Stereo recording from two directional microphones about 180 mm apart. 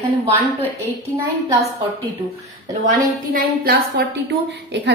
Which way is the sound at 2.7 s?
45° right (ahead or behind).